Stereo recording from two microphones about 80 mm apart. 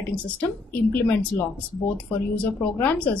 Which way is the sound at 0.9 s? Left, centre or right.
Left.